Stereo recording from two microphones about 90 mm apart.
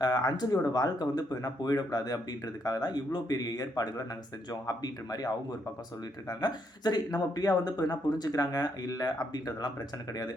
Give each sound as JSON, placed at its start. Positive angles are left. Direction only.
{"t": 0.0, "sound": "speech", "side_deg": 45}